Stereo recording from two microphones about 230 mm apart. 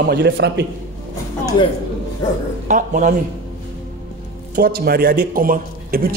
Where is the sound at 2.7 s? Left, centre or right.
Right.